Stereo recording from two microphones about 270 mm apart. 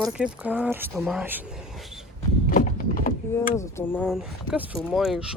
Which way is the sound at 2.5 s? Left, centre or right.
Left.